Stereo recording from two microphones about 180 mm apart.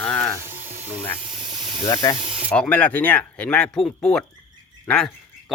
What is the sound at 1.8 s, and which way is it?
Speech, 20° left (ahead or behind).